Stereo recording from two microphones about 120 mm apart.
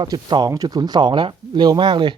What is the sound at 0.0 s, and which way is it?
Speech, 40° right (ahead or behind).